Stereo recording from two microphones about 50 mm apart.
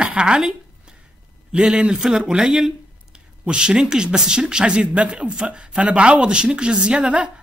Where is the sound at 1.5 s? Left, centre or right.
Centre.